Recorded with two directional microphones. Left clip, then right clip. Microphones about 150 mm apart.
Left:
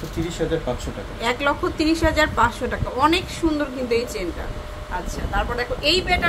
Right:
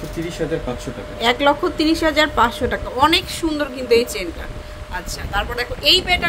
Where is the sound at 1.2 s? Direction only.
25° right (ahead or behind).